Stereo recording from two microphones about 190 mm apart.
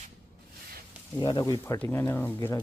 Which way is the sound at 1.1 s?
15° left (ahead or behind).